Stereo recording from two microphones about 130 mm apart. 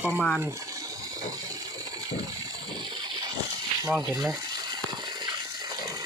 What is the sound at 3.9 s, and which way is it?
Speech, 5° right (ahead or behind).